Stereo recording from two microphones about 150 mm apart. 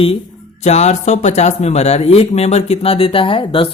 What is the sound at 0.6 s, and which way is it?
Speech, 50° left (ahead or behind).